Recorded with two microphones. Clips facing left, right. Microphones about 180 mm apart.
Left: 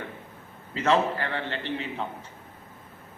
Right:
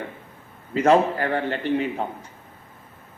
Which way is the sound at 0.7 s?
45° right (ahead or behind).